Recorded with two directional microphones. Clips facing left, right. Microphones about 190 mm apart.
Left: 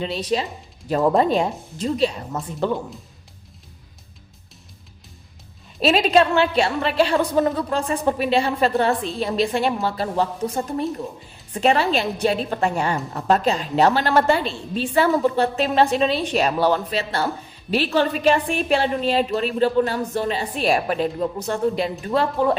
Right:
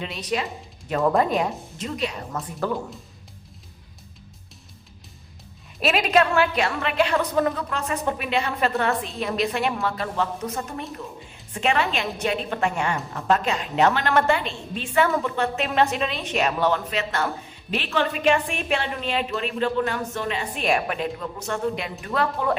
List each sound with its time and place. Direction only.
0.0 s a woman's voice: 30° left (ahead or behind)
5.8 s a woman's voice: 30° left (ahead or behind)